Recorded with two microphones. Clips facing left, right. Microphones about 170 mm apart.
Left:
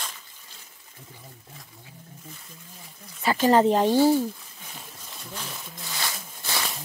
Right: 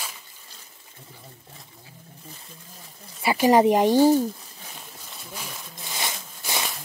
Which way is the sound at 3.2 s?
10° right (ahead or behind).